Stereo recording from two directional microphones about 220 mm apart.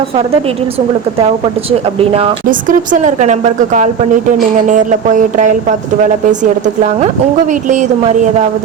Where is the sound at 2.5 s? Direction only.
35° right (ahead or behind).